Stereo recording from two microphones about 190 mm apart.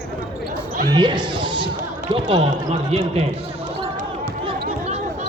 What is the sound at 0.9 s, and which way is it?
Speech, 25° right (ahead or behind).